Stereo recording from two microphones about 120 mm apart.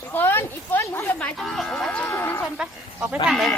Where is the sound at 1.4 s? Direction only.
Centre (ahead or behind).